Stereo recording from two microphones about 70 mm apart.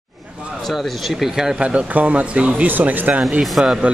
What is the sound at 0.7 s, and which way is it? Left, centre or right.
Speech, centre.